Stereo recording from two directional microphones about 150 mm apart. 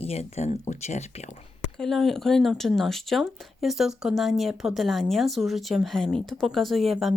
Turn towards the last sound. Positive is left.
turn(degrees=0)  # may be behind; listen again after turning